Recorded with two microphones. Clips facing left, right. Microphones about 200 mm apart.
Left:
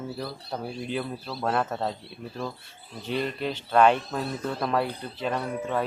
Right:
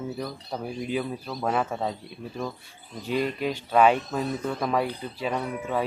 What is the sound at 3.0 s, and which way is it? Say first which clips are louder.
Speech: right 2 dB; 10° right (ahead or behind).